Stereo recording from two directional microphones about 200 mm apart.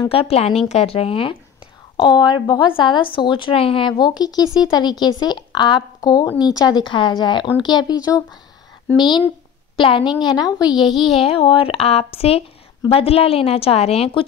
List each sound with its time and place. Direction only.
0.0 s a woman's voice: 30° left (ahead or behind)
10.9 s a child's voice: centre (ahead or behind)
11.1 s a woman's voice: 30° left (ahead or behind)